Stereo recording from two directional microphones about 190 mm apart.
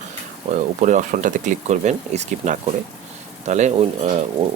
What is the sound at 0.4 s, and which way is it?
Speech, 45° right (ahead or behind).